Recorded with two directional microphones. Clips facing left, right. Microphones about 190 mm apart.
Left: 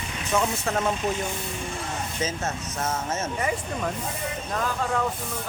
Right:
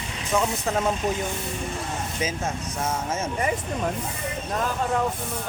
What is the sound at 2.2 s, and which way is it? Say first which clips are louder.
Speech: right 1 dB; 10° right (ahead or behind).